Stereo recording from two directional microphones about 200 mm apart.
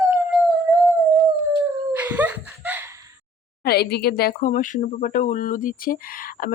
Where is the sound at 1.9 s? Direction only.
10° right (ahead or behind).